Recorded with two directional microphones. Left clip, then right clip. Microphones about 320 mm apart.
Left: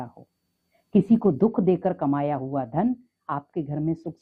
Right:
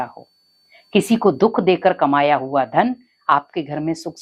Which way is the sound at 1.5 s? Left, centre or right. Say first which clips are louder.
Right 8 dB; centre.